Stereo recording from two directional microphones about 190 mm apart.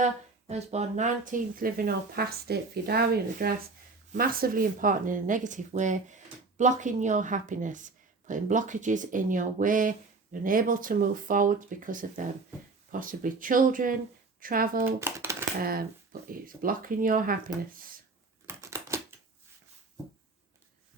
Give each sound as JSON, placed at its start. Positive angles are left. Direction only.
{"t": 0.0, "sound": "speech", "side_deg": -35}
{"t": 14.9, "sound": "a sound", "side_deg": -15}
{"t": 15.6, "sound": "speech", "side_deg": -50}
{"t": 18.4, "sound": "crushing", "side_deg": -15}